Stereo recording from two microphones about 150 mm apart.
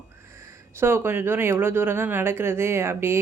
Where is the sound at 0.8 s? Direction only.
15° right (ahead or behind).